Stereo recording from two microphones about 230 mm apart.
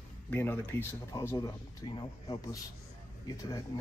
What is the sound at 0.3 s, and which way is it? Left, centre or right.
Speech, centre.